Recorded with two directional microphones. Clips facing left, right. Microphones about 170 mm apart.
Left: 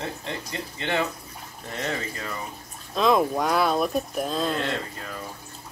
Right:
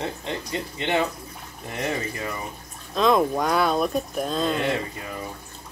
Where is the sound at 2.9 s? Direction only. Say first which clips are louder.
Right 1 dB; centre (ahead or behind).